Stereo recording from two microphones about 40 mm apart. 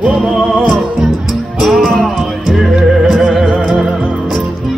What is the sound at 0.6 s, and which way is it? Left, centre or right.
Music, centre.